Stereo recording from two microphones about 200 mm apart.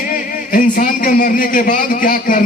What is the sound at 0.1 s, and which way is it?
A man's voice, 40° left (ahead or behind).